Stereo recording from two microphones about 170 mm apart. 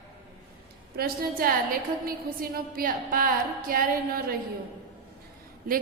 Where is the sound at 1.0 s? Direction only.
60° right (ahead or behind).